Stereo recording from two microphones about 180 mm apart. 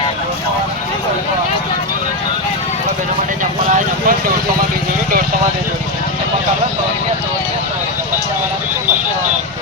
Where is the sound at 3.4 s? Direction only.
45° right (ahead or behind).